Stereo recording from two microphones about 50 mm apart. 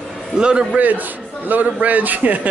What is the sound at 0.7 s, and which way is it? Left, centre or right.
A man's voice, right.